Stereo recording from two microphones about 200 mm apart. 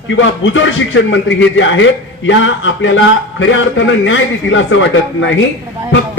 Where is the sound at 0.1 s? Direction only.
70° left (ahead or behind).